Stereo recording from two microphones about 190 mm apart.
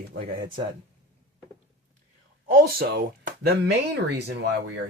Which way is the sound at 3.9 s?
65° right (ahead or behind).